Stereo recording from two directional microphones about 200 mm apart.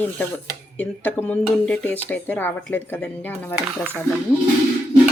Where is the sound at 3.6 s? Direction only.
10° right (ahead or behind).